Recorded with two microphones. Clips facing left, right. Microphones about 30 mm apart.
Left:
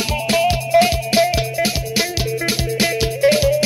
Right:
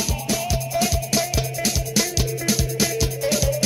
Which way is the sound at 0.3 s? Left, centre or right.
Left.